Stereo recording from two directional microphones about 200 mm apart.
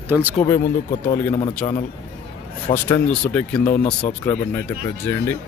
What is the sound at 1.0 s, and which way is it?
Speech, 25° left (ahead or behind).